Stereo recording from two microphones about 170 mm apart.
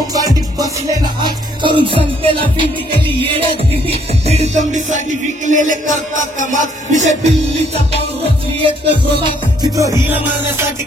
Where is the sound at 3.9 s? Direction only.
40° right (ahead or behind).